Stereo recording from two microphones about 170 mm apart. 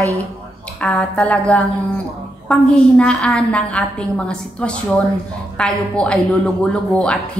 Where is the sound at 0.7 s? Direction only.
5° left (ahead or behind).